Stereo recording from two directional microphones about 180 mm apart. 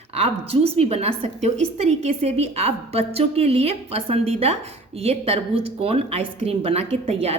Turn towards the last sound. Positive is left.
turn(degrees=-35)  # may be behind; listen again after turning